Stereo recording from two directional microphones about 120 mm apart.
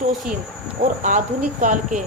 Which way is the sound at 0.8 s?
90° right.